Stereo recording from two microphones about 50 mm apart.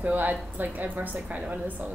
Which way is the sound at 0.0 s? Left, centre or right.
Right.